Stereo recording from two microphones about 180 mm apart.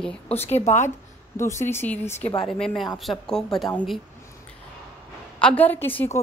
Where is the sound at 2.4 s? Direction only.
Centre (ahead or behind).